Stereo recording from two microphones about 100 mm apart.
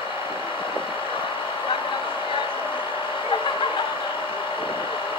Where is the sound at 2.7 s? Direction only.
55° left (ahead or behind).